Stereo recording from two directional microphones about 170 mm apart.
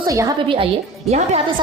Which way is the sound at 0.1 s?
20° right (ahead or behind).